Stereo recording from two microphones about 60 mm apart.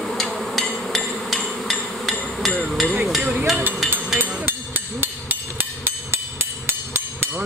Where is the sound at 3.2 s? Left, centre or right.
Right.